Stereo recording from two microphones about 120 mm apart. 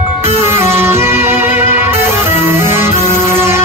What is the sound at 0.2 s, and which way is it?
Music, 20° right (ahead or behind).